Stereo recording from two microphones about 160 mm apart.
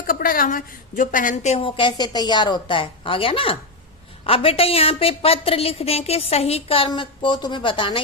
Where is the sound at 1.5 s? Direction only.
35° left (ahead or behind).